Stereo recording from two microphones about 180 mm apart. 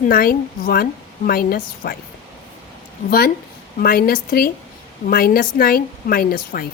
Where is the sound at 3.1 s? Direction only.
55° left (ahead or behind).